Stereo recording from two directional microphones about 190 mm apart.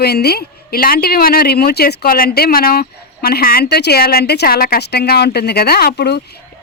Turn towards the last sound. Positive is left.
turn(degrees=60)  # may be behind; listen again after turning